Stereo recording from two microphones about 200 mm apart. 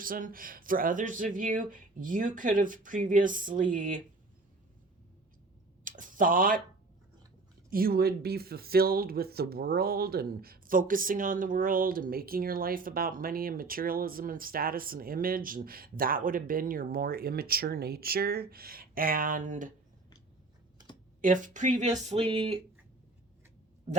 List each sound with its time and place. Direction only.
0.0 s speech: 45° right (ahead or behind)
5.8 s speech: 40° right (ahead or behind)
7.7 s speech: 45° right (ahead or behind)
21.2 s speech: 40° right (ahead or behind)